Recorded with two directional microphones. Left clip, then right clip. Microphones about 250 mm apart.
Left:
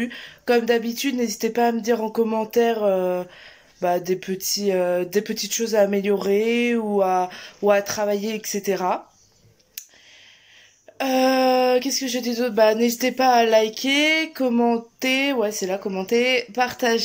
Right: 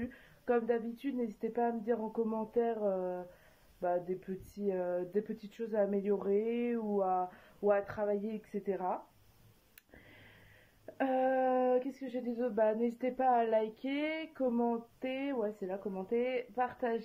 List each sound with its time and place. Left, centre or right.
0.0 s speech: centre
6.8 s speech: left
7.1 s speech: centre
11.0 s speech: centre